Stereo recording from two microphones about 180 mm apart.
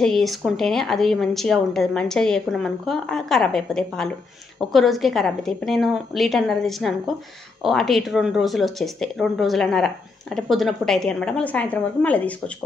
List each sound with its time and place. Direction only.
0.0 s speech: centre (ahead or behind)